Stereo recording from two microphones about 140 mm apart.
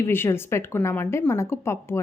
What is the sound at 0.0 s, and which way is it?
Speech, 15° left (ahead or behind).